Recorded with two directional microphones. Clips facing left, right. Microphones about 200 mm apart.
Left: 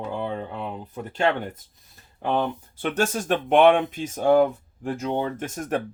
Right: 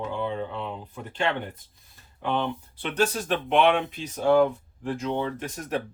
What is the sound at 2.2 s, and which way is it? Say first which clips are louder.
Speech: left 3 dB; 45° left (ahead or behind).